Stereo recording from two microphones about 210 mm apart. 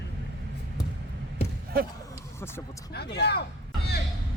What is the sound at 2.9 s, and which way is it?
Speech, 50° left (ahead or behind).